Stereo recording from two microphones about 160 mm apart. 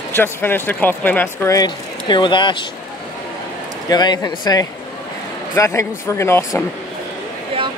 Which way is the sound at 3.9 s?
25° left (ahead or behind).